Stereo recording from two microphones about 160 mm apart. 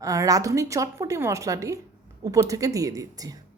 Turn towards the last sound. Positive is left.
turn(degrees=-20)  # may be behind; listen again after turning